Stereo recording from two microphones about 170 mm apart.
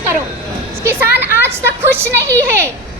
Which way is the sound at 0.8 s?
15° right (ahead or behind).